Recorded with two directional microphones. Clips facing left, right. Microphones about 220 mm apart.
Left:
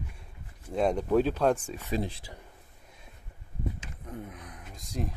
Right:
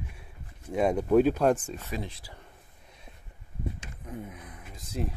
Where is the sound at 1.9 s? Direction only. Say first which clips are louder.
Left 7 dB; 30° left (ahead or behind).